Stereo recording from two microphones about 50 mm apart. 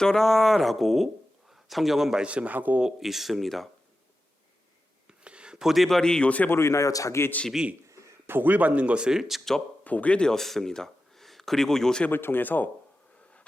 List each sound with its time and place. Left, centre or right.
0.0 s speech: centre
2.2 s a man's voice: right
2.8 s speech: centre
5.0 s a sound: right
5.6 s speech: centre
6.0 s speech: centre
6.5 s a man's voice: left
7.9 s a sound: right
8.3 s speech: right
9.0 s speech: centre
9.8 s speech: left
10.3 s speech: centre
12.1 s speech: left